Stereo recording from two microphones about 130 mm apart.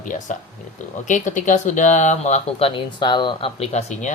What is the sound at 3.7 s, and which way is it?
Speech, 65° left (ahead or behind).